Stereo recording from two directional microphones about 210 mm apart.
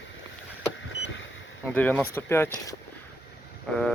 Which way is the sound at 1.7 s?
10° left (ahead or behind).